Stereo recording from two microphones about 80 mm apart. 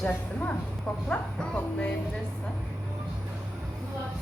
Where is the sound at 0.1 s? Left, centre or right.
Centre.